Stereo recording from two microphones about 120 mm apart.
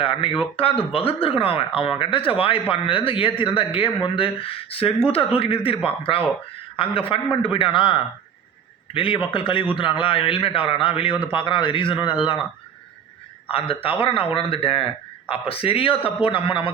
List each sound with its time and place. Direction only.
0.0 s speech: 50° left (ahead or behind)
13.5 s speech: 50° left (ahead or behind)